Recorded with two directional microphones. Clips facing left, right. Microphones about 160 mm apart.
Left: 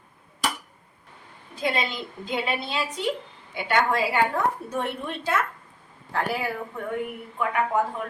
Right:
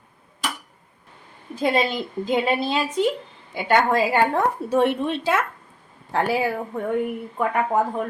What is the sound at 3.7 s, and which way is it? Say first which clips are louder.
Speech: right 4 dB; 50° right (ahead or behind).